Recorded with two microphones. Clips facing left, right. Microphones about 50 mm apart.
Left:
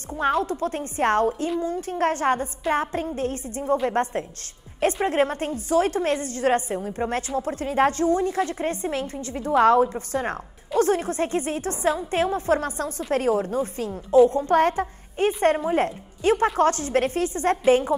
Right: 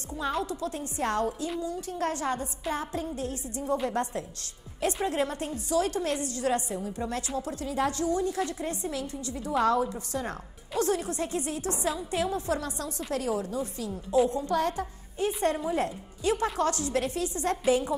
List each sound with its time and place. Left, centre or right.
0.1 s a woman's voice: left